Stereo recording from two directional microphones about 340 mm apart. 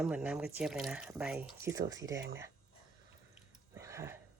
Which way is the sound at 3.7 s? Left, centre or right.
Centre.